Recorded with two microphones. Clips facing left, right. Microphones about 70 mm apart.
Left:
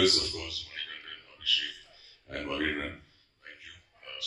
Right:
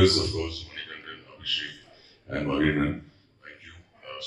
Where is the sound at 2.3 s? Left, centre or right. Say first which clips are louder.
Right 8 dB; right.